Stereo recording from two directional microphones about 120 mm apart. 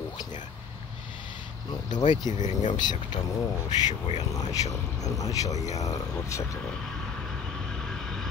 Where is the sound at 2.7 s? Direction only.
35° left (ahead or behind).